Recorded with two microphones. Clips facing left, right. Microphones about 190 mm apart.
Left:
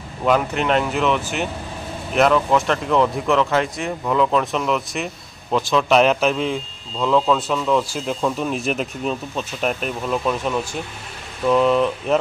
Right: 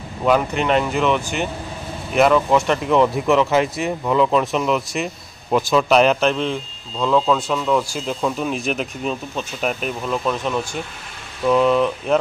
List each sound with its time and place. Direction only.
0.2 s speech: centre (ahead or behind)